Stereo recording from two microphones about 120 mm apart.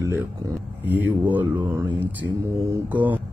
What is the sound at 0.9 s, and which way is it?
Mantra, 15° right (ahead or behind).